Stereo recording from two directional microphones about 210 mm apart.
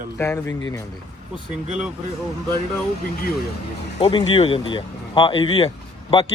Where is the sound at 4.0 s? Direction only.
25° left (ahead or behind).